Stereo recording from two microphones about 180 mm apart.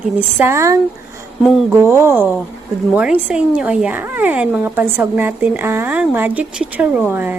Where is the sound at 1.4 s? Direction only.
Centre (ahead or behind).